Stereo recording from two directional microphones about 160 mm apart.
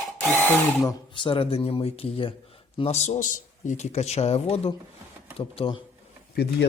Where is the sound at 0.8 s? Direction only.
30° left (ahead or behind).